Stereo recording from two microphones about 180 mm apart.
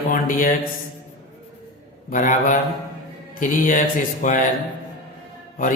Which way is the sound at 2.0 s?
45° left (ahead or behind).